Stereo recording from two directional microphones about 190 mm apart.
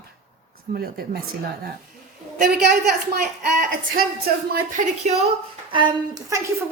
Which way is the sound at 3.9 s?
50° right (ahead or behind).